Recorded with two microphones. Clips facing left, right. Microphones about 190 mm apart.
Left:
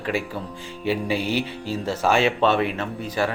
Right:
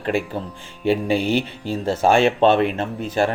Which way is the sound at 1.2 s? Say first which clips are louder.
Right 4 dB; 5° left (ahead or behind).